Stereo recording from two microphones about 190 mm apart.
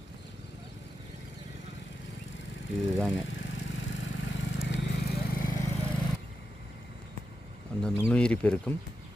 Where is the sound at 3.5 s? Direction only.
80° left.